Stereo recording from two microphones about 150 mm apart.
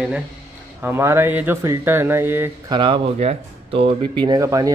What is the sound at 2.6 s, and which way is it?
Speech, 35° right (ahead or behind).